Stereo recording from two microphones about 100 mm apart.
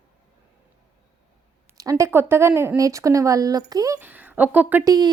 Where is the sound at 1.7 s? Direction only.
35° right (ahead or behind).